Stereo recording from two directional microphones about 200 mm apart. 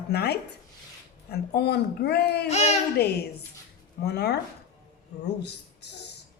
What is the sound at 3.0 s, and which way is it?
Speech, 55° left (ahead or behind).